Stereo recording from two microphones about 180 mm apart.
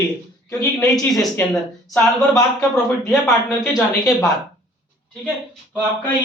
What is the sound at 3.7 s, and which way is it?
Speech, centre (ahead or behind).